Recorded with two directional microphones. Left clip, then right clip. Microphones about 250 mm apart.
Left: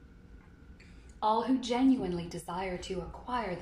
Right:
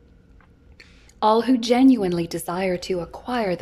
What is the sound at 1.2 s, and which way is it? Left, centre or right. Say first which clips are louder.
A woman's voice: right 10 dB; right.